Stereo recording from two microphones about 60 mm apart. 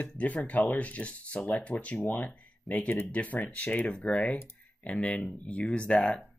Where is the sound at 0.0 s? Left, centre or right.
Left.